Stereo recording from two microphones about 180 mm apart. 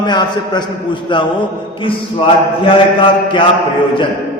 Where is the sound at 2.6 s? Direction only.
30° left (ahead or behind).